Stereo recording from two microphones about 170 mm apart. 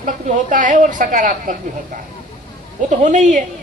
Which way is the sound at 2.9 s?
45° right (ahead or behind).